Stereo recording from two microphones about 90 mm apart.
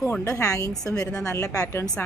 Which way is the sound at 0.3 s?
35° left (ahead or behind).